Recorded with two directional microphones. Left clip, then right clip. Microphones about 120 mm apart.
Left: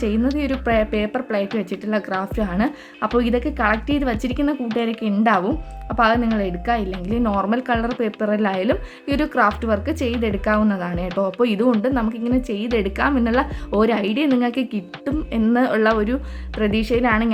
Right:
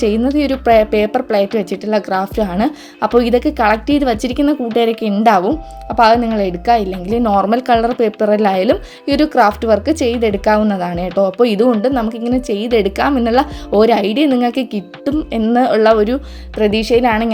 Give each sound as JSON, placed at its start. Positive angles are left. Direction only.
{"t": 0.0, "sound": "a woman's voice", "side_deg": -35}